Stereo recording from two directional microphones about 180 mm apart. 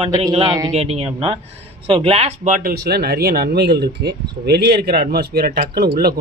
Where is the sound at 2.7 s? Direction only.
65° right (ahead or behind).